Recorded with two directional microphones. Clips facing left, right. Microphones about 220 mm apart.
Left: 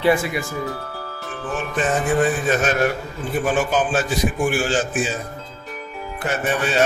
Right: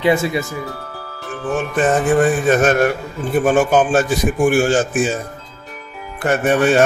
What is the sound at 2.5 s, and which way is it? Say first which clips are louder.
A man's voice: right 5 dB; 50° right (ahead or behind).